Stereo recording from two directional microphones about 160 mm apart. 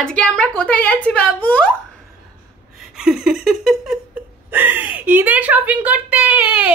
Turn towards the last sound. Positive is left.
turn(degrees=-10)  # may be behind; listen again after turning